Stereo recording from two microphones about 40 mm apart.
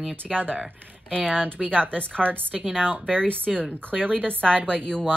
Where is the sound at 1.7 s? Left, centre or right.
Left.